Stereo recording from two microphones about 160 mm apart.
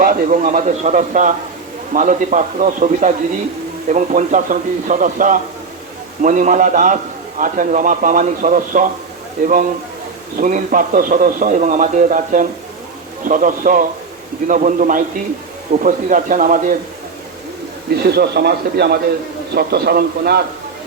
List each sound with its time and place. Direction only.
0.0 s a man's voice: 55° right (ahead or behind)
10.3 s a man's voice: 55° right (ahead or behind)
17.9 s a man's voice: 85° right
19.5 s a man's voice: 75° right (ahead or behind)